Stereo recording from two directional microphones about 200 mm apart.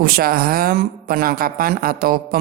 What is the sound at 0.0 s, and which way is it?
Speech, 50° right (ahead or behind).